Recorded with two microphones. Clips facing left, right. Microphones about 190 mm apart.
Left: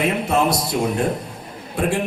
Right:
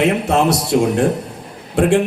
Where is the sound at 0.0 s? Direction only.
75° right (ahead or behind).